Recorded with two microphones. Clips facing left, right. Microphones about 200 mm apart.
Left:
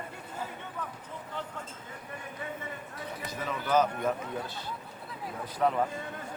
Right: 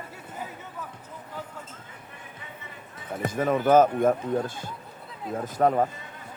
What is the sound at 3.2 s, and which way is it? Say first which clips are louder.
A man's voice: right 13 dB; 50° right (ahead or behind).